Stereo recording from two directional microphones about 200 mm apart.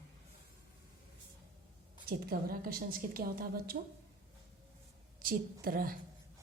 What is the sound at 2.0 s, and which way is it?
A woman's voice, 50° right (ahead or behind).